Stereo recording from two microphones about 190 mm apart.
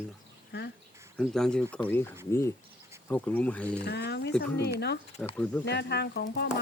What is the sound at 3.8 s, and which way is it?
Speech, 60° left (ahead or behind).